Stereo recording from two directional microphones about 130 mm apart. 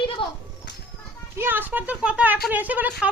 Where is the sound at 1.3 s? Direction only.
15° right (ahead or behind).